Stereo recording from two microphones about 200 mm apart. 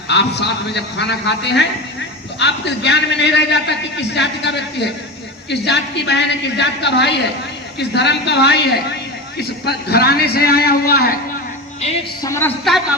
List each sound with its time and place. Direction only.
0.1 s a man's voice: 60° left (ahead or behind)
12.2 s a woman's voice: 15° left (ahead or behind)
12.7 s a woman's voice: centre (ahead or behind)